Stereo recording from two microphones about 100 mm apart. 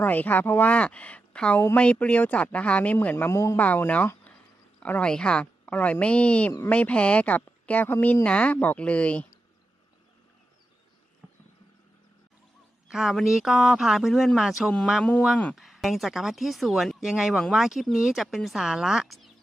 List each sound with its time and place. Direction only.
0.0 s a woman's voice: 15° left (ahead or behind)
3.3 s speech: 30° left (ahead or behind)
3.6 s a woman's voice: 15° left (ahead or behind)
12.9 s speech: 5° right (ahead or behind)